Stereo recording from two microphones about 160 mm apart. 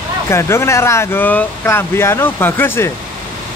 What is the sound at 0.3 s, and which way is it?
Speech, 15° left (ahead or behind).